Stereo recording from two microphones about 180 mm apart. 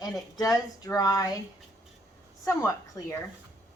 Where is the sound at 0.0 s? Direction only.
20° left (ahead or behind).